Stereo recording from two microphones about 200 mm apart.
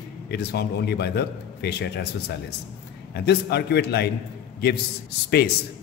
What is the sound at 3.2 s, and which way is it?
Speech, 55° left (ahead or behind).